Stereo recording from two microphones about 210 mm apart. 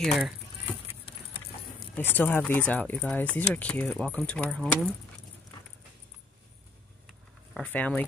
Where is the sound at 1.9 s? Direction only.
10° left (ahead or behind).